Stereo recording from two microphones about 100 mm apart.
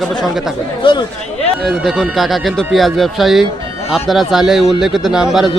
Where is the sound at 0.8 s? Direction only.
50° left (ahead or behind).